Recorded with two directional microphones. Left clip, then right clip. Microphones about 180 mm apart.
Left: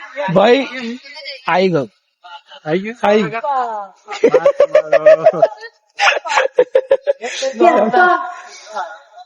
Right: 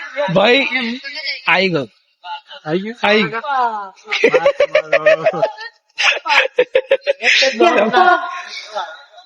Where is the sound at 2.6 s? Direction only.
20° left (ahead or behind).